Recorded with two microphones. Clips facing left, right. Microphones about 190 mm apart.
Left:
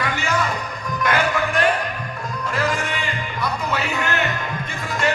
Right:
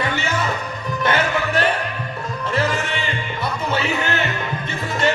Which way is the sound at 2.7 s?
30° right (ahead or behind).